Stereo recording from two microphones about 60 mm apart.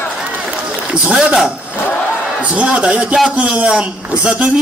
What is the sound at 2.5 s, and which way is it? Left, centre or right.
A man's voice, centre.